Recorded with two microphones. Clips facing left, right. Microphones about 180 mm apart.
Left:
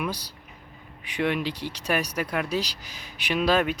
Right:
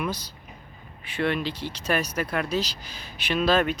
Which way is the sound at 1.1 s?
15° left (ahead or behind).